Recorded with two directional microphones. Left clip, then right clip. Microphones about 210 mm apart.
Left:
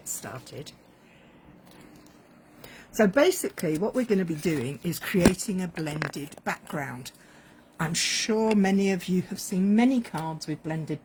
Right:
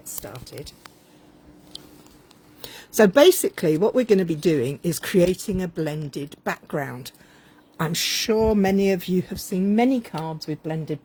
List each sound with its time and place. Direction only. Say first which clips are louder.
0.2 s speech: right 3 dB; 5° left (ahead or behind)
2.9 s speech: right 7 dB; 45° right (ahead or behind)